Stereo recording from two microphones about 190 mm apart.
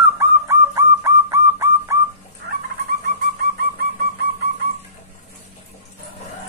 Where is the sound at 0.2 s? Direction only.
15° right (ahead or behind).